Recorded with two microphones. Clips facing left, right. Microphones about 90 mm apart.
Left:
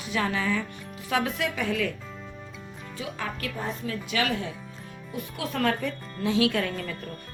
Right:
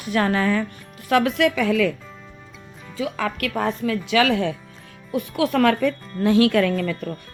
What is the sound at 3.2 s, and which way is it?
Speech, 85° right.